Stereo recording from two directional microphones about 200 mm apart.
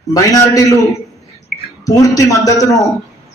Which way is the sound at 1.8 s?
15° left (ahead or behind).